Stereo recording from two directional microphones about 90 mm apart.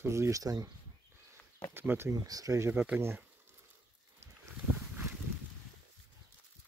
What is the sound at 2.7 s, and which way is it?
Speech, 15° right (ahead or behind).